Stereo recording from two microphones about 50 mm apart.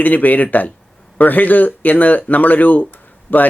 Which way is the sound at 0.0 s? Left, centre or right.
Left.